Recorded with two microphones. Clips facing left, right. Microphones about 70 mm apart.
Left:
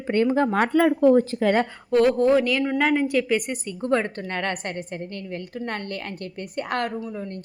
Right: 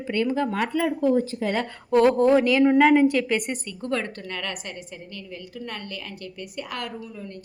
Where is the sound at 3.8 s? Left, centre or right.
Left.